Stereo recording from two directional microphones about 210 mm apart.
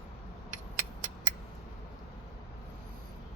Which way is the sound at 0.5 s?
40° right (ahead or behind).